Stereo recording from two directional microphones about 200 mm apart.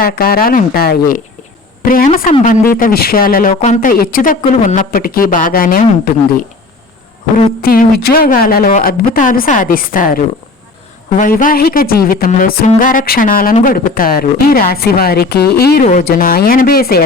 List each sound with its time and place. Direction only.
0.0 s speech: 50° left (ahead or behind)
4.4 s speech: 35° left (ahead or behind)
7.3 s speech: 45° left (ahead or behind)